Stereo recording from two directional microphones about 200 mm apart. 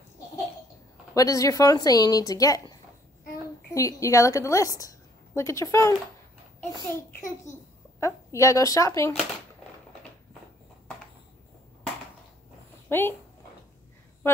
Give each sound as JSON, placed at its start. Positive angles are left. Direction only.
{"t": 1.1, "sound": "a woman's voice", "side_deg": 15}
{"t": 3.7, "sound": "a woman's voice", "side_deg": 15}
{"t": 7.2, "sound": "a child's voice", "side_deg": 40}
{"t": 8.0, "sound": "a woman's voice", "side_deg": 15}
{"t": 12.9, "sound": "speech", "side_deg": 10}
{"t": 14.2, "sound": "a woman's voice", "side_deg": 10}